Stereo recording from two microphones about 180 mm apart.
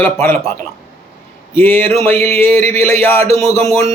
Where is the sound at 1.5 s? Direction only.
10° left (ahead or behind).